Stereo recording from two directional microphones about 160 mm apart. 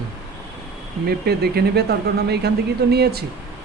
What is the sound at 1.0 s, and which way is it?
Speech, 85° right.